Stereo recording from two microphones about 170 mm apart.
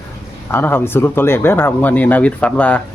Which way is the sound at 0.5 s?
15° left (ahead or behind).